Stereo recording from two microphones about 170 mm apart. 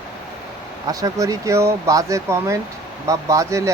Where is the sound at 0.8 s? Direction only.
20° right (ahead or behind).